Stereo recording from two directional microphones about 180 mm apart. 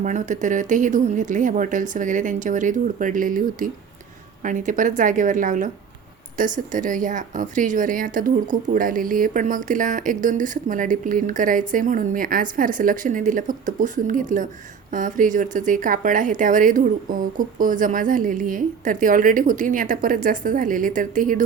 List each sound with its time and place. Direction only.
0.0 s speech: 45° right (ahead or behind)